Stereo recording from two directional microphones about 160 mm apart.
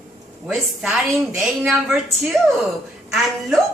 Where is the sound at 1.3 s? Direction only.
5° right (ahead or behind).